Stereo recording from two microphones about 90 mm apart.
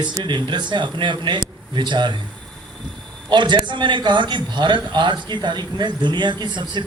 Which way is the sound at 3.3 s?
55° right (ahead or behind).